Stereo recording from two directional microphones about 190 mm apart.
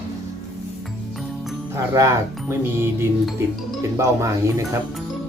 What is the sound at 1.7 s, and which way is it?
Speech, 15° right (ahead or behind).